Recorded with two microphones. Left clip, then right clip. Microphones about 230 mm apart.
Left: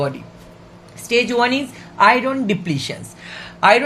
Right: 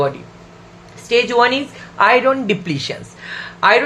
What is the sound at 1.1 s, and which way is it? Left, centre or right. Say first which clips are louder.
Speech: right 3 dB; left.